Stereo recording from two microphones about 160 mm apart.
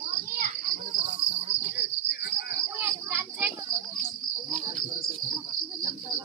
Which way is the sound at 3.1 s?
15° right (ahead or behind).